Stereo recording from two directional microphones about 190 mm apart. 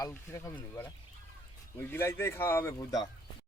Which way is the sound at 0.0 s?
15° left (ahead or behind).